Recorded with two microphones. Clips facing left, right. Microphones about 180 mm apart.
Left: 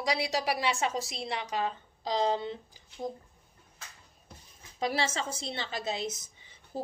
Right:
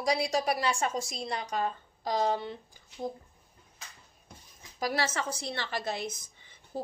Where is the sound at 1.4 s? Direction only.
50° right (ahead or behind).